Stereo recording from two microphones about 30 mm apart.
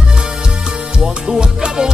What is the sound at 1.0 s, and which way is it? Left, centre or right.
Music, centre.